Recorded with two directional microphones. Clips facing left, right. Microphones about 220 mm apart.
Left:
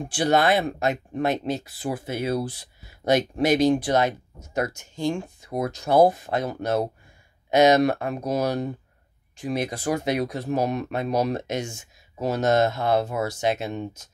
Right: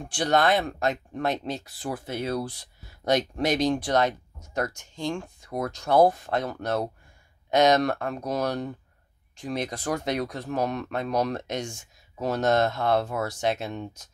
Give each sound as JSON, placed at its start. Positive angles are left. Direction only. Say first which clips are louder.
{"t": 0.0, "sound": "speech", "louder": "left 2 dB", "side_deg": 5}